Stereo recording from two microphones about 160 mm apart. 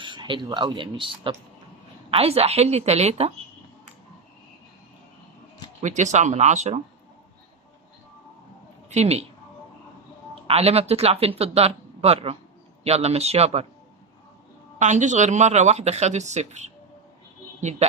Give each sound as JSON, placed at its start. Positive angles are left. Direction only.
{"t": 0.0, "sound": "speech", "side_deg": -30}
{"t": 5.8, "sound": "speech", "side_deg": -50}
{"t": 8.9, "sound": "speech", "side_deg": -40}
{"t": 10.4, "sound": "speech", "side_deg": -40}
{"t": 14.8, "sound": "a man's voice", "side_deg": -50}